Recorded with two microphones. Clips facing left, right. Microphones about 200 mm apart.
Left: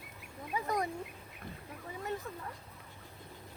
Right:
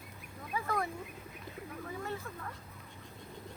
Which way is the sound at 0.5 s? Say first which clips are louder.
Left 1 dB; 15° left (ahead or behind).